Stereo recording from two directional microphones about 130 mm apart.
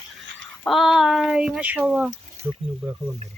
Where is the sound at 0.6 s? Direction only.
Centre (ahead or behind); by 2.6 s 15° right (ahead or behind).